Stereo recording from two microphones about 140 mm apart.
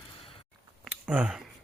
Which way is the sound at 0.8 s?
10° right (ahead or behind).